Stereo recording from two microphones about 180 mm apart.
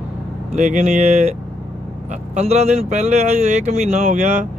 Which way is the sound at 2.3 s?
40° right (ahead or behind).